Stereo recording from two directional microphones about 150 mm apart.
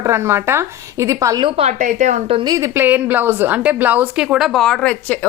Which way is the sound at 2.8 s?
10° right (ahead or behind).